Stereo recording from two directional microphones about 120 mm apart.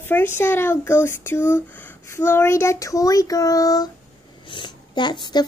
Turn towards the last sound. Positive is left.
turn(degrees=40)  # may be behind; listen again after turning